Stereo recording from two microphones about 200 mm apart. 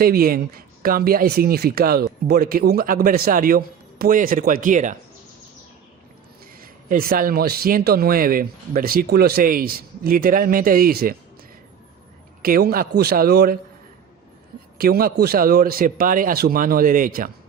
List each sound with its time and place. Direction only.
0.0 s speech: 50° right (ahead or behind)
6.6 s speech: 45° right (ahead or behind)
12.4 s speech: 50° right (ahead or behind)
14.8 s speech: 50° right (ahead or behind)